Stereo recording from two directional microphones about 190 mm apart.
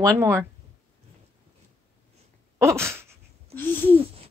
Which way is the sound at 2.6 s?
15° right (ahead or behind).